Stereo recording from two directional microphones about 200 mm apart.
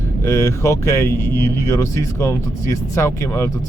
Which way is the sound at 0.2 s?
15° left (ahead or behind).